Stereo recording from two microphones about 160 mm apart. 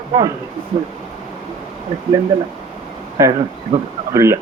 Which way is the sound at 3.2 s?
20° right (ahead or behind).